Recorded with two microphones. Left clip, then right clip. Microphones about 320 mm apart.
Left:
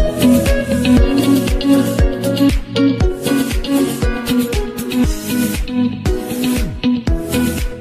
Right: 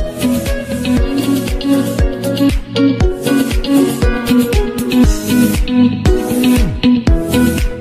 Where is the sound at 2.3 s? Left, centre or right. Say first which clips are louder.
Right 1 dB; centre.